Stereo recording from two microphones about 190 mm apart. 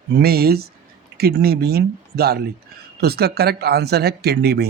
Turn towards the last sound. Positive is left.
turn(degrees=-55)  # may be behind; listen again after turning